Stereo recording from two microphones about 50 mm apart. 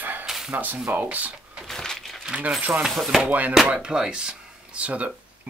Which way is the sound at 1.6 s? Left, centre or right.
Centre.